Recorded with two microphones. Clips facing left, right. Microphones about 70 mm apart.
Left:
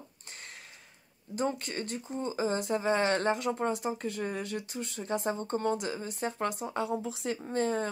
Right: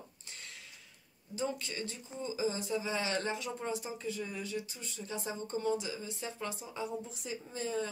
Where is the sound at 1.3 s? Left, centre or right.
Left.